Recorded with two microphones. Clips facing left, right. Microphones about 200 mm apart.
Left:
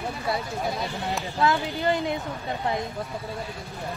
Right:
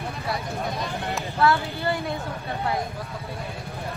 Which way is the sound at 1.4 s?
20° left (ahead or behind).